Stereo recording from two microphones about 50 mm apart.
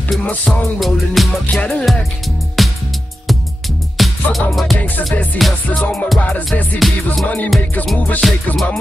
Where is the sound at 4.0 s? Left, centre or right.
Centre.